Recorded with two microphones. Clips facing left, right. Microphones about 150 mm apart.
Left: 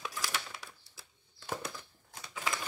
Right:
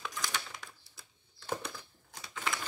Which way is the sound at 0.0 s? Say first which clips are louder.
Even; 5° left (ahead or behind).